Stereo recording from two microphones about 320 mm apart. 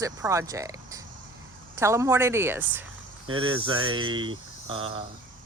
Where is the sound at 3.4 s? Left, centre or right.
Right.